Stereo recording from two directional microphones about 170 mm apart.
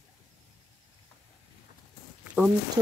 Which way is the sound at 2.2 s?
5° right (ahead or behind).